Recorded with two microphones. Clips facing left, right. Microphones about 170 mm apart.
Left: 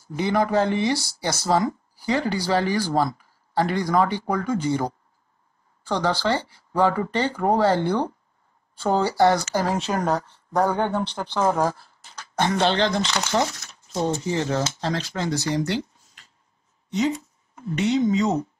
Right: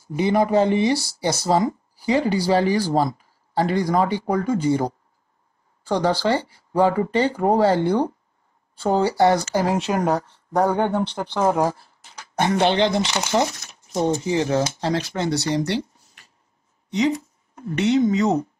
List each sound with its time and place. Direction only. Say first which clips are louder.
0.1 s speech: right 3 dB; 10° right (ahead or behind)
15.2 s speech: right 1 dB; 70° right (ahead or behind)
16.9 s speech: right 2 dB; 65° right (ahead or behind)